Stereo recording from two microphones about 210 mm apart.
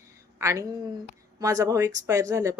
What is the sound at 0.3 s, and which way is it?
A woman's voice, 15° right (ahead or behind).